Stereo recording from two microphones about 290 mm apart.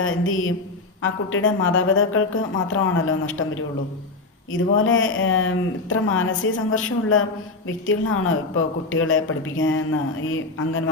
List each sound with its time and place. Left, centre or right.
0.0 s a woman's voice: left